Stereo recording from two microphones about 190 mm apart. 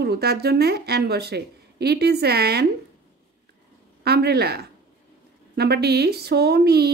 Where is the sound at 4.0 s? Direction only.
60° right (ahead or behind).